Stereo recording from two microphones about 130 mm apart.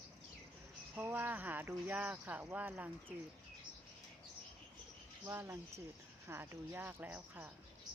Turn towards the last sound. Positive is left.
turn(degrees=-15)  # may be behind; listen again after turning